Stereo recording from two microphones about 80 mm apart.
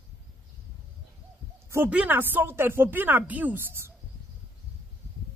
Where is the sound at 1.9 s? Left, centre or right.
Centre.